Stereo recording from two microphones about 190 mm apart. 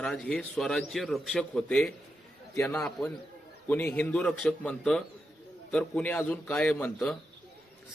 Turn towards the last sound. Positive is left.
turn(degrees=5)  # may be behind; listen again after turning